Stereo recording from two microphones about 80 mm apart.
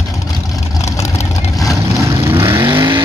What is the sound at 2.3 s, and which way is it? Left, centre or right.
Vehicle, right.